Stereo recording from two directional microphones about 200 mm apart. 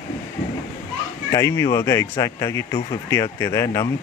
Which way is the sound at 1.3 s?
15° left (ahead or behind).